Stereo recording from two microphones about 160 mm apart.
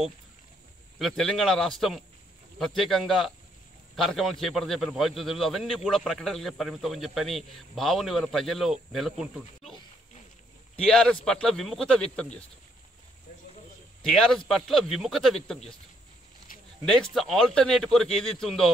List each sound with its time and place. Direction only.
0.9 s a man's voice: centre (ahead or behind)
10.9 s a man's voice: 5° left (ahead or behind)
14.2 s a man's voice: 5° left (ahead or behind)
16.8 s a man's voice: centre (ahead or behind)